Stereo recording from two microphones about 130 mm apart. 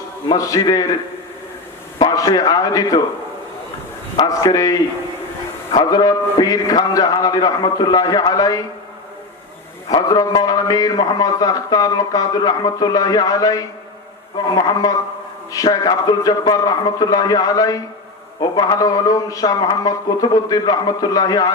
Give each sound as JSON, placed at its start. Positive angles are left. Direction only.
{"t": 0.3, "sound": "a man's voice", "side_deg": 25}
{"t": 2.0, "sound": "a man's voice", "side_deg": 30}
{"t": 4.2, "sound": "a man's voice", "side_deg": 25}
{"t": 9.9, "sound": "a man's voice", "side_deg": 30}